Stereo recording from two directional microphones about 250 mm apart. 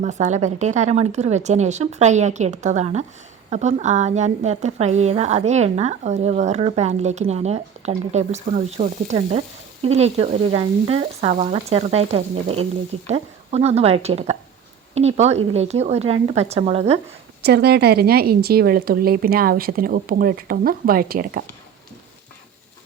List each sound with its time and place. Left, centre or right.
0.0 s a woman's voice: right
17.4 s a woman's voice: right